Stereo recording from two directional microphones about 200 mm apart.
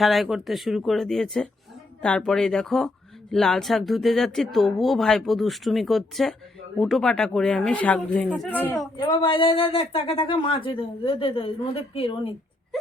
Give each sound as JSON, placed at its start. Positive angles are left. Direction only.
{"t": 0.0, "sound": "speech", "side_deg": 0}
{"t": 9.0, "sound": "speech", "side_deg": 25}